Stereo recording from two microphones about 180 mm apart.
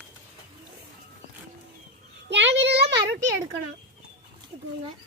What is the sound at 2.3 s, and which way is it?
Speech, 75° right (ahead or behind).